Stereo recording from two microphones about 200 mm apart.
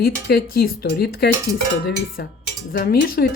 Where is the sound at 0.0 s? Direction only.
50° left (ahead or behind).